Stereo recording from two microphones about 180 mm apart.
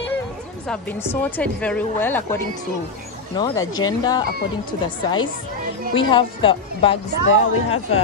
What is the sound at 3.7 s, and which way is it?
Speech, 20° left (ahead or behind).